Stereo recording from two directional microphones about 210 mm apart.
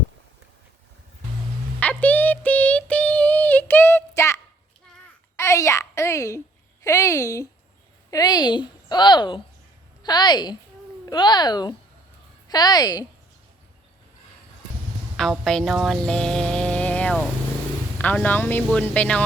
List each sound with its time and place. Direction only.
1.8 s female singing: 5° left (ahead or behind)
5.4 s a woman's voice: 15° left (ahead or behind)
15.1 s music: centre (ahead or behind)
17.9 s speech: 5° left (ahead or behind)